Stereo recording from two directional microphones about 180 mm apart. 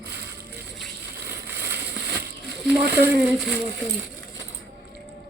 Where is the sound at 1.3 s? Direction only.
70° right (ahead or behind).